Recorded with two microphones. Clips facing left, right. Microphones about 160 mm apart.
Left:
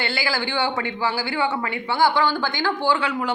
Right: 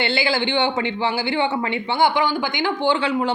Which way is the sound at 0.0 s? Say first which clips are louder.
Right 4 dB; 25° right (ahead or behind).